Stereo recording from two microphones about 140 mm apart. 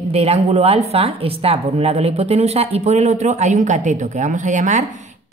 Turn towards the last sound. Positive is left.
turn(degrees=-60)  # may be behind; listen again after turning